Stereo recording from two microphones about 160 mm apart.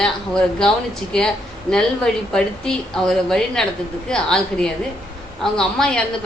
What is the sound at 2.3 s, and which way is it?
A woman's voice, 5° left (ahead or behind).